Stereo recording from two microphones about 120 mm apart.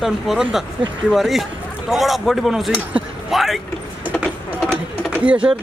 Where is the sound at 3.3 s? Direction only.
Centre (ahead or behind).